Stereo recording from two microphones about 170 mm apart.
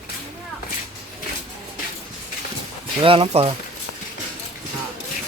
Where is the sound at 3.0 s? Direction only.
35° right (ahead or behind).